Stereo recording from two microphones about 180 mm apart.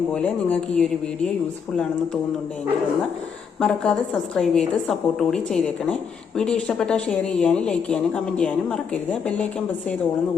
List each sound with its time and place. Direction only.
0.1 s speech: 5° left (ahead or behind)
3.6 s a woman's voice: 5° left (ahead or behind)